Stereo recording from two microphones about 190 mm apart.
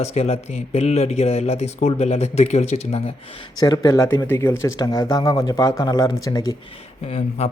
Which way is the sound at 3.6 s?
15° left (ahead or behind).